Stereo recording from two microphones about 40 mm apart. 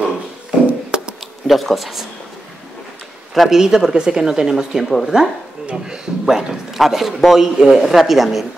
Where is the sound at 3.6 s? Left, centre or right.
Centre.